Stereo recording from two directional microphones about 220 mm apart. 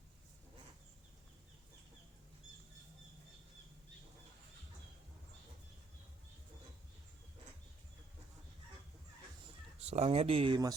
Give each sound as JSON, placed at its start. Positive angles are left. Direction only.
{"t": 9.8, "sound": "speech", "side_deg": -30}